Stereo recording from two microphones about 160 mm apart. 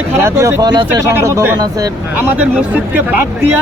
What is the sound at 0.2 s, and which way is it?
Speech, 15° right (ahead or behind).